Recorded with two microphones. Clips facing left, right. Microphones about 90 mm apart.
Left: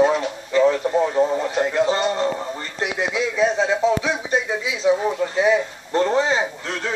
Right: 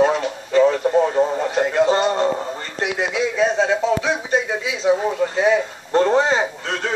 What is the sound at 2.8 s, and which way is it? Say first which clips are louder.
Speech: right 2 dB; 20° right (ahead or behind).